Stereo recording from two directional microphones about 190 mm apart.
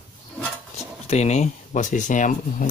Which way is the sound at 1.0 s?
35° left (ahead or behind).